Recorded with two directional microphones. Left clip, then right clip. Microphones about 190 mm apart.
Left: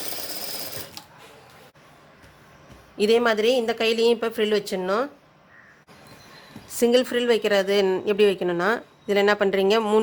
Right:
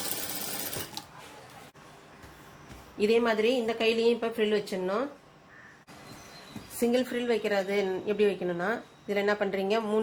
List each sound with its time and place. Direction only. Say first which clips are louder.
3.0 s speech: left 5 dB; 45° left (ahead or behind)
6.8 s speech: left 8 dB; 45° left (ahead or behind)